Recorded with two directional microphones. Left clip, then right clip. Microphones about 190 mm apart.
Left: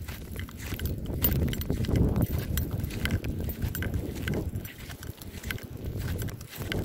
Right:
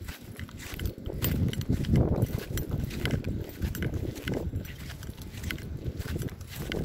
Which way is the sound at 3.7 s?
35° left (ahead or behind).